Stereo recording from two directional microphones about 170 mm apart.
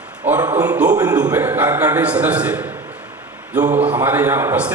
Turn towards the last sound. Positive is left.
turn(degrees=-10)  # may be behind; listen again after turning